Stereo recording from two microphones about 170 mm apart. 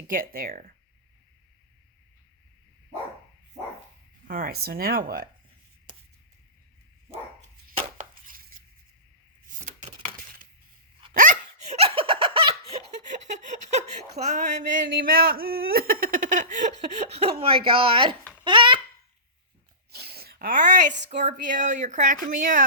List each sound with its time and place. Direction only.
0.1 s speech: 55° right (ahead or behind)
4.3 s speech: 60° right (ahead or behind)
7.7 s chopping: 55° right (ahead or behind)
9.6 s a sound: 45° right (ahead or behind)
11.1 s laughter: 50° right (ahead or behind); by 12.8 s 30° right (ahead or behind)
13.1 s a sound: 45° right (ahead or behind)
14.4 s a woman's voice: 55° right (ahead or behind); by 18.8 s 30° right (ahead or behind)
19.9 s a sound: 70° right (ahead or behind); by 20.8 s 50° right (ahead or behind)
21.2 s speech: 50° right (ahead or behind)